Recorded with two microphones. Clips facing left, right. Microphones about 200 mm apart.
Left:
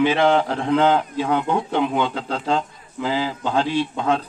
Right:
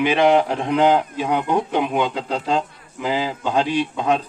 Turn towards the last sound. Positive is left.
turn(degrees=-15)  # may be behind; listen again after turning